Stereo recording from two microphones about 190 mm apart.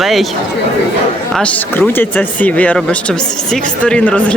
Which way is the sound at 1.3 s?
5° left (ahead or behind).